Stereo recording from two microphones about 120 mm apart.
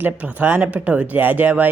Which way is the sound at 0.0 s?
10° right (ahead or behind).